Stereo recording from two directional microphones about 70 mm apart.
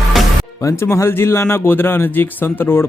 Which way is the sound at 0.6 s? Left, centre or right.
Left.